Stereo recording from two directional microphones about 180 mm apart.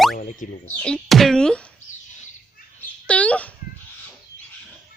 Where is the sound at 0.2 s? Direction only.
45° left (ahead or behind).